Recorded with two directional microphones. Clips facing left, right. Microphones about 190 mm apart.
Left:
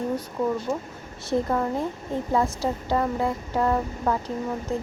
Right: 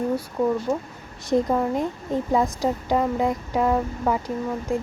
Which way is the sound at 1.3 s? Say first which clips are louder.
Right 3 dB; 15° right (ahead or behind).